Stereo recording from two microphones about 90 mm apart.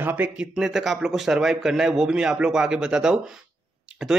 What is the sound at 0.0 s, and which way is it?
Speech, 20° right (ahead or behind).